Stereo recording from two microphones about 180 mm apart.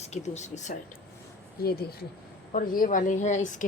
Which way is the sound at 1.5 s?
60° left (ahead or behind).